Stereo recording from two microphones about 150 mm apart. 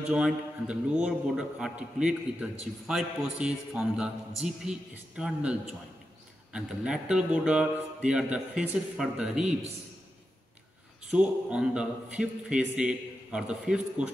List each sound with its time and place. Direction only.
0.1 s a man's voice: 5° right (ahead or behind)
11.1 s a man's voice: 5° right (ahead or behind)